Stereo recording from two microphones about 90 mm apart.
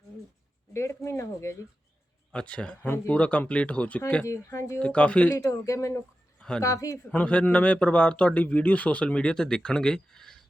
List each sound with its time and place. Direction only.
0.7 s speech: 30° left (ahead or behind)
2.3 s a man's voice: 10° left (ahead or behind)
2.8 s speech: 25° left (ahead or behind)
3.2 s a man's voice: 15° left (ahead or behind)
4.4 s speech: 35° left (ahead or behind)
4.8 s a man's voice: 15° left (ahead or behind)
5.3 s speech: 35° left (ahead or behind)
7.1 s a man's voice: 15° left (ahead or behind)